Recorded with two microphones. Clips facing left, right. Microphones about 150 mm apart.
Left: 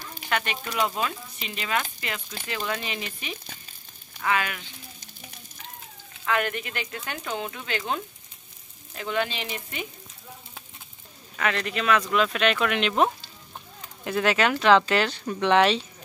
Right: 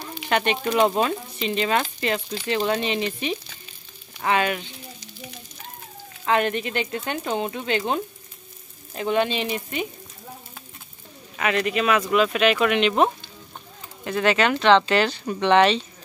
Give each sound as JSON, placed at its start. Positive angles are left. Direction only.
{"t": 0.3, "sound": "speech", "side_deg": -25}
{"t": 0.7, "sound": "speech", "side_deg": -35}
{"t": 4.2, "sound": "speech", "side_deg": -25}
{"t": 6.2, "sound": "speech", "side_deg": -25}
{"t": 11.3, "sound": "speech", "side_deg": -10}